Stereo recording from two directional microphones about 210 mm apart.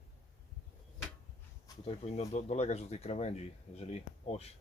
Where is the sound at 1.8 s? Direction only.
30° left (ahead or behind).